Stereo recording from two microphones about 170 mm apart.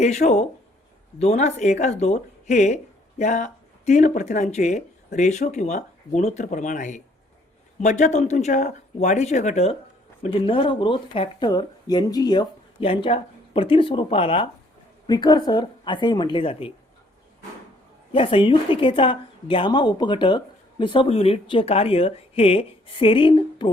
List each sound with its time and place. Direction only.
0.0 s a woman's voice: 40° left (ahead or behind)
18.1 s speech: 30° left (ahead or behind)